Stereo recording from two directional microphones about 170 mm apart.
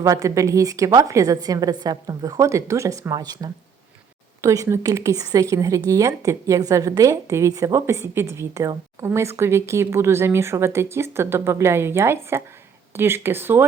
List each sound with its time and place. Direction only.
0.0 s a woman's voice: 20° right (ahead or behind)